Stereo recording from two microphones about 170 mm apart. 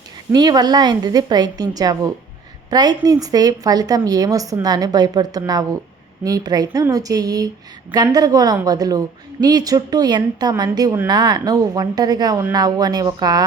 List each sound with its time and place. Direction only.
0.3 s a woman's voice: 25° right (ahead or behind)